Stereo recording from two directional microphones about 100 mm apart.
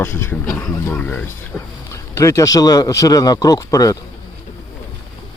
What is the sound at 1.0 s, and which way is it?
A man's voice, 15° left (ahead or behind).